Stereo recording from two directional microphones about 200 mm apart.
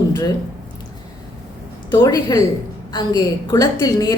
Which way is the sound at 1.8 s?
20° left (ahead or behind).